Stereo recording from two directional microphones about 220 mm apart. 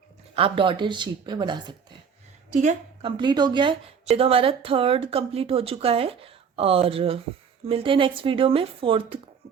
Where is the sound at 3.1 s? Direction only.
20° right (ahead or behind).